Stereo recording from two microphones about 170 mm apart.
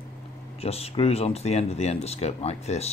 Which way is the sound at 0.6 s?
35° left (ahead or behind).